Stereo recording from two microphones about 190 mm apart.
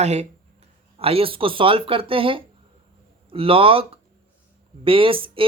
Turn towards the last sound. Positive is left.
turn(degrees=-30)  # may be behind; listen again after turning